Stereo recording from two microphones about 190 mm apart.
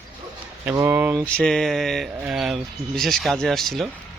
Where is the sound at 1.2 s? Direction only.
5° left (ahead or behind).